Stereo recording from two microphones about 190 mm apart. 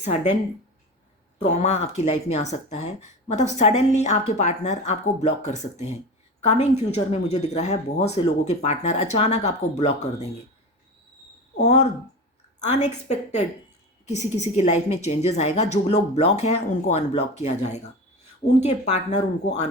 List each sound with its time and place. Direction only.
0.0 s speech: 40° left (ahead or behind)
1.4 s speech: 35° left (ahead or behind)
11.6 s speech: 35° left (ahead or behind)